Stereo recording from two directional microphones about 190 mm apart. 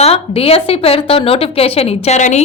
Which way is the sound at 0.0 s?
30° left (ahead or behind).